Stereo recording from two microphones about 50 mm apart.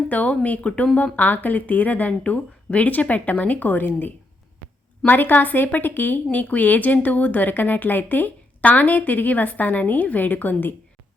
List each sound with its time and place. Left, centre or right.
0.1 s speech: left